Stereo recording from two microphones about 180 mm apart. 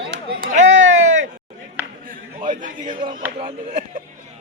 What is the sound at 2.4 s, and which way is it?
Speech, 50° right (ahead or behind).